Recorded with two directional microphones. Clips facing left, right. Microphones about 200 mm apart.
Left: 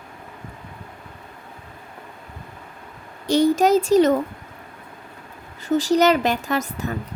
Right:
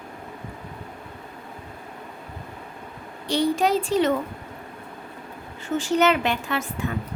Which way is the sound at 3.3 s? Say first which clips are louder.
Left 5 dB; 45° left (ahead or behind).